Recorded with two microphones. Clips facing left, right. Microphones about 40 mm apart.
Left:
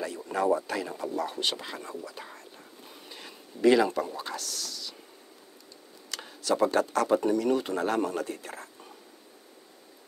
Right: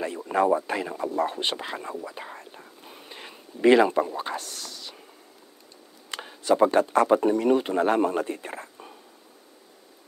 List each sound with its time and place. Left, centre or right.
0.0 s speech: right
6.0 s speech: right